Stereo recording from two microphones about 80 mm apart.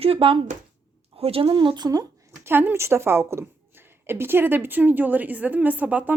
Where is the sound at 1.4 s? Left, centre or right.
Right.